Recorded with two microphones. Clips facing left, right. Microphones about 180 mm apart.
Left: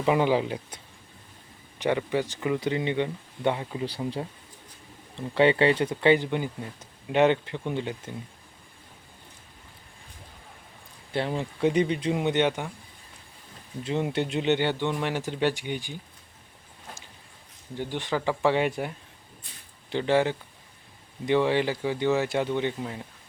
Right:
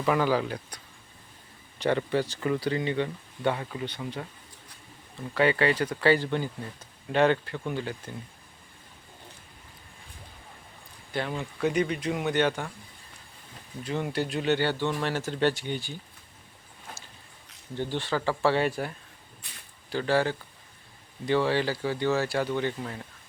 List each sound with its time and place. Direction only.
0.0 s speech: 20° left (ahead or behind)
1.8 s speech: 15° left (ahead or behind)
3.8 s speech: 30° left (ahead or behind)
11.1 s speech: 30° left (ahead or behind)
13.8 s speech: 25° left (ahead or behind)
17.7 s speech: 15° left (ahead or behind)
19.4 s speech: 75° right (ahead or behind)
19.9 s speech: 20° left (ahead or behind)